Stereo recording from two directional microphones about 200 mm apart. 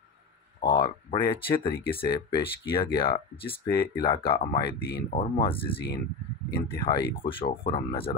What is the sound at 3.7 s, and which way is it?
Speech, 50° left (ahead or behind).